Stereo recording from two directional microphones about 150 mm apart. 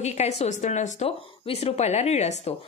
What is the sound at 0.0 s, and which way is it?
A woman's voice, 45° left (ahead or behind).